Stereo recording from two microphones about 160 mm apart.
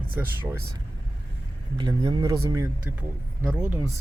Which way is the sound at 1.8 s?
25° right (ahead or behind).